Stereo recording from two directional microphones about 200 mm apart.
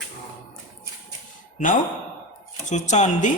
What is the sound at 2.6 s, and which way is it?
Speech, 35° left (ahead or behind).